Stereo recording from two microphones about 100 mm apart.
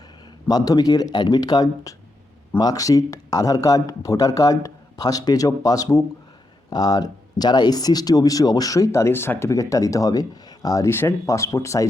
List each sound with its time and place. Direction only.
0.4 s speech: 40° left (ahead or behind)
10.8 s speech: 25° left (ahead or behind)